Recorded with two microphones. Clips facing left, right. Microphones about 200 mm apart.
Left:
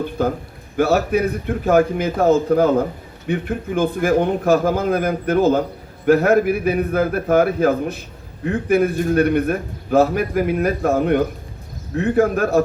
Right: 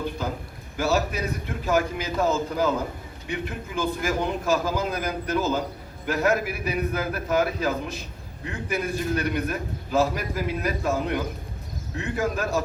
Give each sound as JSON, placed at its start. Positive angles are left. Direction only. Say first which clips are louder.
{"t": 0.8, "sound": "a man's voice", "louder": "left 8 dB", "side_deg": 55}